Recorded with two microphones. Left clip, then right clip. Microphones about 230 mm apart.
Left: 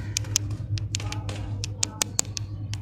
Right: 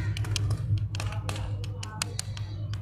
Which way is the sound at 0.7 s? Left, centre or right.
Left.